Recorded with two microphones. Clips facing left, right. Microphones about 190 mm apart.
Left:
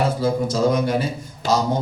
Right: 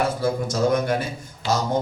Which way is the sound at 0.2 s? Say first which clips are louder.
Left 3 dB; 50° right (ahead or behind).